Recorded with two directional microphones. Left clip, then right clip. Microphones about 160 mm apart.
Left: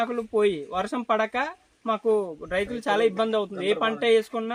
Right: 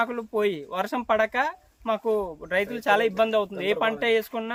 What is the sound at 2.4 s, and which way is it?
Speech, 30° right (ahead or behind).